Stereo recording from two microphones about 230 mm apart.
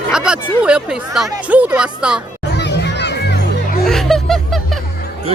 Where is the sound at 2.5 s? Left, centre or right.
Left.